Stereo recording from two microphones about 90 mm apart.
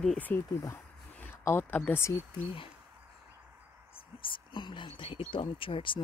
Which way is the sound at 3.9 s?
70° left (ahead or behind).